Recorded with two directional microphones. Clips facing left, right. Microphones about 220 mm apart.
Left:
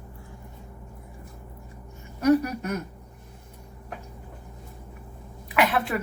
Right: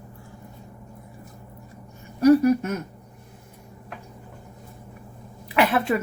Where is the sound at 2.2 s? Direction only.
30° right (ahead or behind).